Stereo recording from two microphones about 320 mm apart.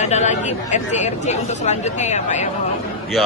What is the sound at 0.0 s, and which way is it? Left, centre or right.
Speech, left.